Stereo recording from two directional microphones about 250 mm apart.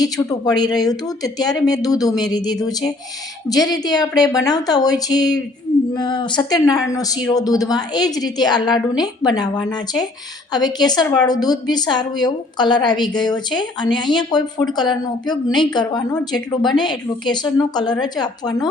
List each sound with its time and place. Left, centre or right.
0.0 s a woman's voice: centre